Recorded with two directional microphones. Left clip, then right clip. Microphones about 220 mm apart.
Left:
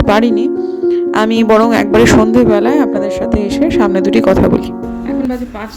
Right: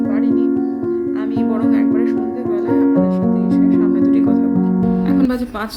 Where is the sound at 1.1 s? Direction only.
45° left (ahead or behind).